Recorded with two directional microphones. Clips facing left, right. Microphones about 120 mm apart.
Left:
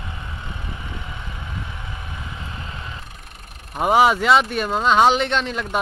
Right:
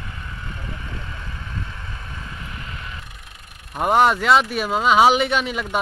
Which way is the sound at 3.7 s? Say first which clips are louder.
Left 1 dB; 5° left (ahead or behind).